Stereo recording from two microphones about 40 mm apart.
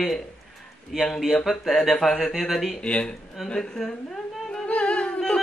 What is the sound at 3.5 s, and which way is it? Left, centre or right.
Speech, centre.